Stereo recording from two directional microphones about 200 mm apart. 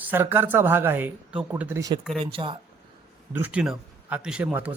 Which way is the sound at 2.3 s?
25° right (ahead or behind).